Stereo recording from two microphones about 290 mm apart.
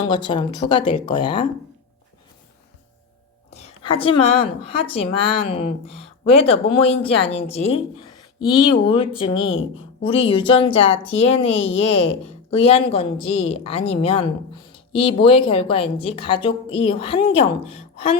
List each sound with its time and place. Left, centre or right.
0.0 s speech: centre
3.5 s a woman's voice: centre